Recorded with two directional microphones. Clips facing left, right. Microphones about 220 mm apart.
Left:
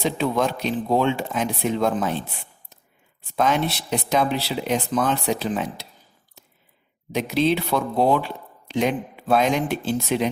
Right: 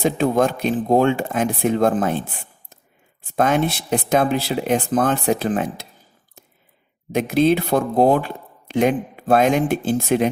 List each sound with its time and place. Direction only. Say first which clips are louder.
0.0 s speech: right 4 dB; 50° right (ahead or behind)
7.1 s speech: right 4 dB; 50° right (ahead or behind)